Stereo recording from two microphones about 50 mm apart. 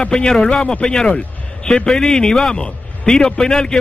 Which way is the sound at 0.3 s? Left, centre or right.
Centre.